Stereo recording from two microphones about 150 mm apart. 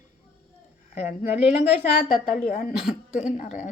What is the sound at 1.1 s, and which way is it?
Speech, 45° left (ahead or behind).